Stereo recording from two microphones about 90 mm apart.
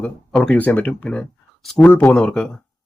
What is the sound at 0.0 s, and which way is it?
Speech, 15° left (ahead or behind).